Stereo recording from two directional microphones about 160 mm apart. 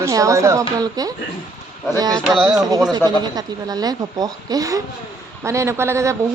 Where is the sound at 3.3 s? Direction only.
25° right (ahead or behind).